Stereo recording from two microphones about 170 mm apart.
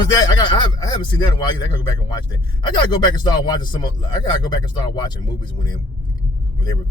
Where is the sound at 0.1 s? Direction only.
25° left (ahead or behind).